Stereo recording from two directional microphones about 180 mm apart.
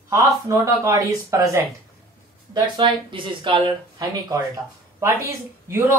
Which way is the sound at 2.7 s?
30° right (ahead or behind).